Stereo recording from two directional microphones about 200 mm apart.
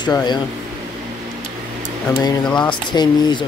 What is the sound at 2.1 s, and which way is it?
Speech, 20° left (ahead or behind).